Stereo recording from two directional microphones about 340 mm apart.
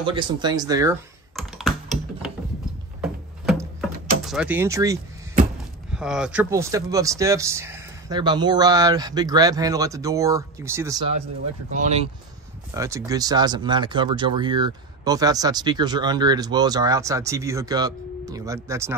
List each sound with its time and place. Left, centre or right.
0.0 s speech: centre
1.3 s computer keyboard: centre
3.0 s a sound: centre
4.2 s speech: centre
5.9 s speech: centre
12.7 s speech: centre